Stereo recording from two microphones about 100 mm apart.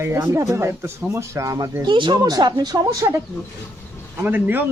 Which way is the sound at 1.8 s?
50° right (ahead or behind).